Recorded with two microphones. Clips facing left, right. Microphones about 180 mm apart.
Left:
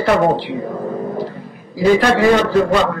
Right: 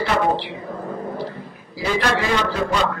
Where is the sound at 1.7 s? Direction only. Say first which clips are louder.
Left 8 dB; 45° left (ahead or behind).